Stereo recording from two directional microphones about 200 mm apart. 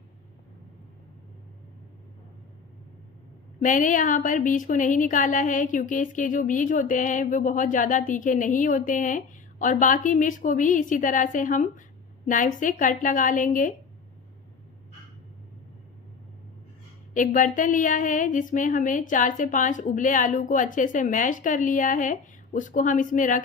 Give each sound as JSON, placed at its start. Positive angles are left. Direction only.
{"t": 3.6, "sound": "a woman's voice", "side_deg": 40}
{"t": 17.1, "sound": "a woman's voice", "side_deg": 40}